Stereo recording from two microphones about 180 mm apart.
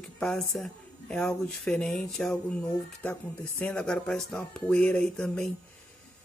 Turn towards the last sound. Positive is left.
turn(degrees=5)  # may be behind; listen again after turning